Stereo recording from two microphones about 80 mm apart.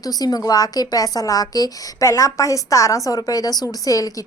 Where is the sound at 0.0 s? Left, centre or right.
Left.